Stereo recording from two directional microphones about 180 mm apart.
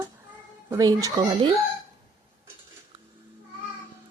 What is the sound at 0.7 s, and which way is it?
Speech, 20° right (ahead or behind).